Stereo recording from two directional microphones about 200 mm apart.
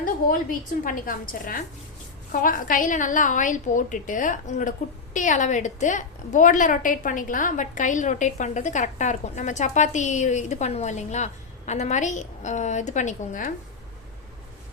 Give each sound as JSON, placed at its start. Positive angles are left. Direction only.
{"t": 0.9, "sound": "a woman's voice", "side_deg": 45}